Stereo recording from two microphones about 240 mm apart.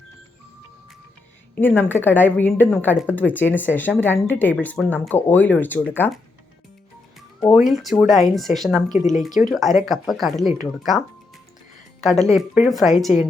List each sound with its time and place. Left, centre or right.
1.5 s speech: centre
7.5 s speech: centre
8.9 s speech: left
9.5 s speech: centre
11.9 s speech: centre